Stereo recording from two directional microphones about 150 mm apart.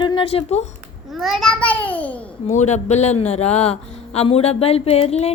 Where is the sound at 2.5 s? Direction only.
50° left (ahead or behind).